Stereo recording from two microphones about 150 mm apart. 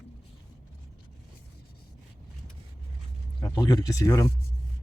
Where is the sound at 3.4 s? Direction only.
20° left (ahead or behind).